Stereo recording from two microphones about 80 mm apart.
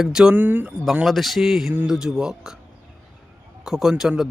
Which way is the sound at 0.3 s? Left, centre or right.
Right.